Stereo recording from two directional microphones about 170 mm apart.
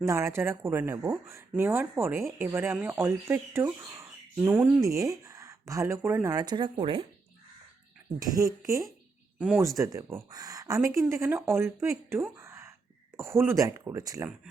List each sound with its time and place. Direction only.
0.0 s speech: 15° right (ahead or behind)
8.2 s speech: 20° right (ahead or behind)
9.4 s speech: 5° right (ahead or behind)
9.6 s speech: 20° right (ahead or behind)